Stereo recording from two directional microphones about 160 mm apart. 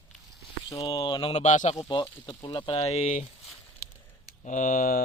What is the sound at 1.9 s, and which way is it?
Speech, 30° left (ahead or behind).